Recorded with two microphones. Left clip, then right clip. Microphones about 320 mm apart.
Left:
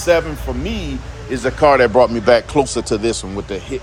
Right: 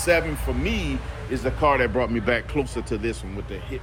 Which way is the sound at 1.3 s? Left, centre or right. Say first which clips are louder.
Left 8 dB; left.